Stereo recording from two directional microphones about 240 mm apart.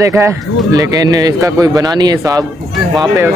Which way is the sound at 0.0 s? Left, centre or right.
Centre.